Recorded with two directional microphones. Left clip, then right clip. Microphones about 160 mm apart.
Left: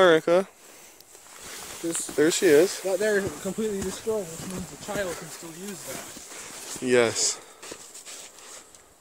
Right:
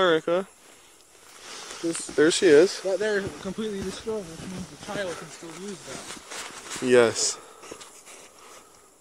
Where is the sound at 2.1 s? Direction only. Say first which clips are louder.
Right 2 dB; 10° left (ahead or behind).